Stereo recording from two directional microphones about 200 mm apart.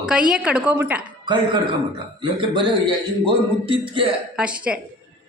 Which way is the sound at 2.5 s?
25° right (ahead or behind).